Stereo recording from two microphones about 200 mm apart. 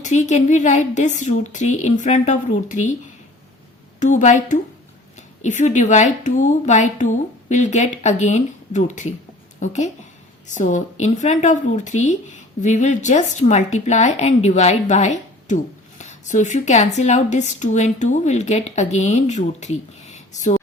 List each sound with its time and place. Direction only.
0.0 s speech: 35° left (ahead or behind)
4.0 s a woman's voice: 40° left (ahead or behind)